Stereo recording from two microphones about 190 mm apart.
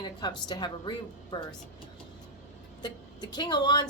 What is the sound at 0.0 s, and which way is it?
A woman's voice, 20° left (ahead or behind).